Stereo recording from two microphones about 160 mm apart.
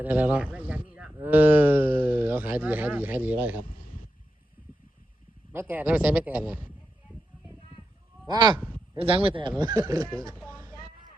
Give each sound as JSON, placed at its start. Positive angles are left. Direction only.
{"t": 0.0, "sound": "a man's voice", "side_deg": -10}
{"t": 3.5, "sound": "a sound", "side_deg": 60}
{"t": 5.5, "sound": "a man's voice", "side_deg": -10}
{"t": 8.3, "sound": "speech", "side_deg": -25}